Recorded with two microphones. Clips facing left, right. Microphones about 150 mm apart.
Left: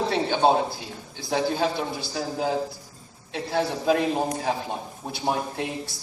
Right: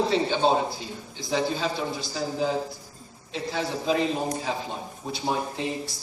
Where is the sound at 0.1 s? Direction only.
60° left (ahead or behind).